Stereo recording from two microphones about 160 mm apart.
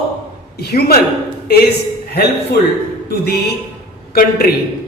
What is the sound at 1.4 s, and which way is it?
Speech, 80° left.